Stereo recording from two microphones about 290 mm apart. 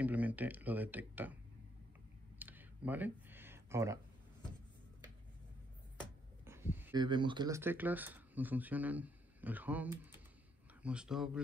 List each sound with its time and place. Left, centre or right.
0.0 s speech: centre
2.3 s a sound: centre
6.4 s speech: centre